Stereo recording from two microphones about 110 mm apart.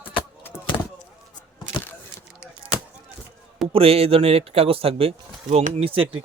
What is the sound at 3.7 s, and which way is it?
Speech, 60° right (ahead or behind).